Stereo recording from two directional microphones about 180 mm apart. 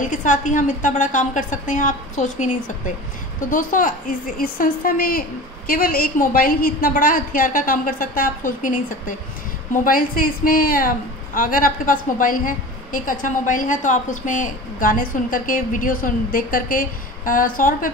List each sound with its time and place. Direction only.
0.0 s a woman's voice: 45° left (ahead or behind)